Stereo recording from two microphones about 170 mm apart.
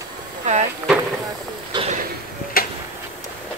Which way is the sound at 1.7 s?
25° right (ahead or behind).